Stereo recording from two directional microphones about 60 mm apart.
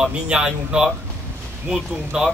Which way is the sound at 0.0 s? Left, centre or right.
Centre.